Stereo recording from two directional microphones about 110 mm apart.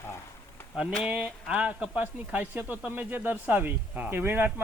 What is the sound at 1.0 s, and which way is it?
Speech, 10° right (ahead or behind).